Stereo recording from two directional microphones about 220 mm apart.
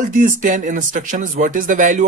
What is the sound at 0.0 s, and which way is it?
Speech, 35° right (ahead or behind).